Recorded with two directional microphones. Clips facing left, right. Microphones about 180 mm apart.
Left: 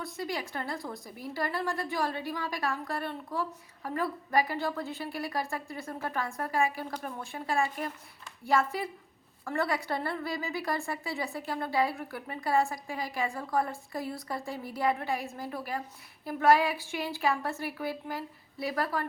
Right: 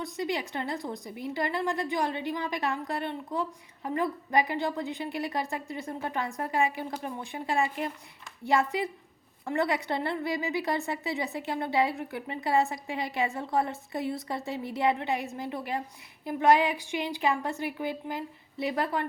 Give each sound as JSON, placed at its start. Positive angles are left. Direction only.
{"t": 0.0, "sound": "a woman's voice", "side_deg": -20}